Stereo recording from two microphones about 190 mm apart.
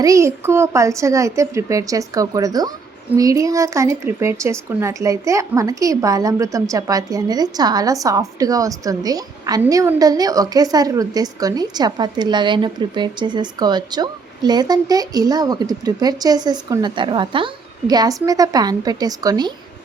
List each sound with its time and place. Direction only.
0.0 s speech: 15° right (ahead or behind)